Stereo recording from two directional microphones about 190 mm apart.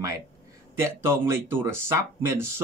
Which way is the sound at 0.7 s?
15° right (ahead or behind).